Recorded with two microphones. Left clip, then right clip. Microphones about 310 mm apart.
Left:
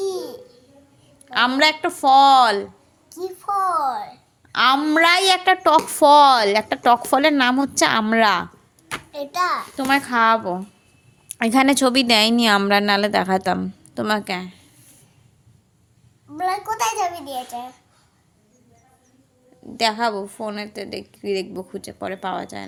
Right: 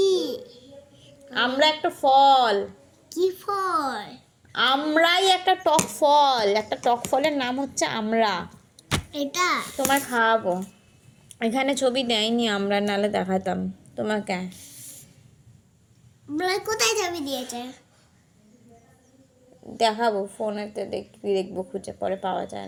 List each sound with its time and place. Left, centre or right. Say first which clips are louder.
0.0 s babbling: right 4 dB; centre
1.3 s a woman's voice: left 4 dB; left
3.1 s a child's voice: even; centre
4.5 s a woman's voice: left 4 dB; left
9.1 s a child's voice: left 3 dB; centre
9.7 s a woman's voice: left 4 dB; left
16.3 s a woman's voice: left 2 dB; centre
19.7 s a woman's voice: left 1 dB; left